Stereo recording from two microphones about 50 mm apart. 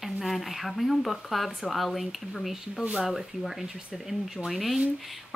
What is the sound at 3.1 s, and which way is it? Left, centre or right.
Speech, centre.